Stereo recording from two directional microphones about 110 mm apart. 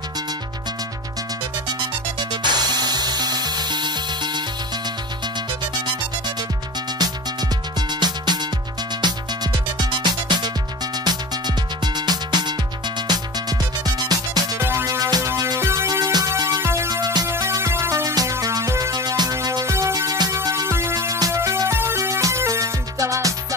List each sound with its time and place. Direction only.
2.1 s music: 40° right (ahead or behind)
7.0 s music: 40° right (ahead or behind)
14.6 s music: 25° right (ahead or behind)